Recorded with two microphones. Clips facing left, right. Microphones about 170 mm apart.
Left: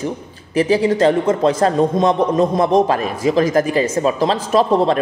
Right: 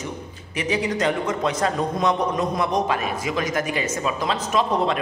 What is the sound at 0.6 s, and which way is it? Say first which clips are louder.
A man's voice: left 9 dB; 35° left (ahead or behind).